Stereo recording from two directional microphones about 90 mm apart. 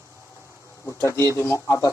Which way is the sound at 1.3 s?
30° left (ahead or behind).